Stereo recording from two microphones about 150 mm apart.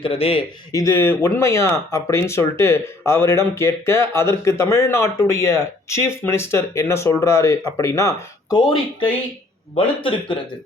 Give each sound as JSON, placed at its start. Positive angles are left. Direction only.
{"t": 0.0, "sound": "a man's voice", "side_deg": 40}
{"t": 0.7, "sound": "speech", "side_deg": 20}
{"t": 10.0, "sound": "a man's voice", "side_deg": 35}